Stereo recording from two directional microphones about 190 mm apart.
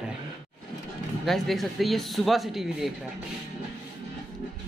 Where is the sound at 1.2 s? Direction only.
Centre (ahead or behind).